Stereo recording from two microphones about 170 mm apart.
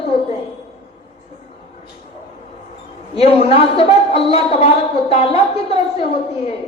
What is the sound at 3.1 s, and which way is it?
A woman's voice, 35° left (ahead or behind).